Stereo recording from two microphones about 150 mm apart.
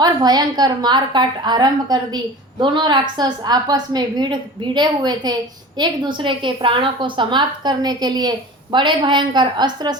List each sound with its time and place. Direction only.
0.0 s a woman's voice: 25° right (ahead or behind)